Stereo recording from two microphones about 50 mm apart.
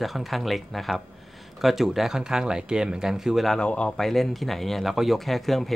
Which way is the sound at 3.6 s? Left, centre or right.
Left.